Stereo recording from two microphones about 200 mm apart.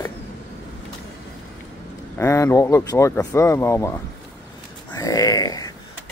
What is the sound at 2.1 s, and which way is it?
Speech, 15° left (ahead or behind).